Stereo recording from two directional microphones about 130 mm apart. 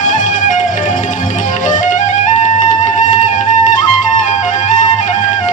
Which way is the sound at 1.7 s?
75° left (ahead or behind).